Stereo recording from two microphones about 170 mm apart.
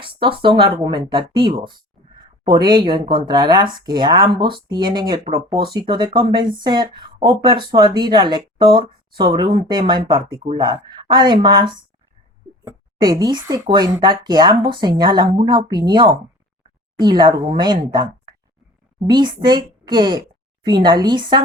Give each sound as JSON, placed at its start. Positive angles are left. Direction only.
{"t": 0.0, "sound": "speech", "side_deg": -30}
{"t": 13.0, "sound": "speech", "side_deg": -25}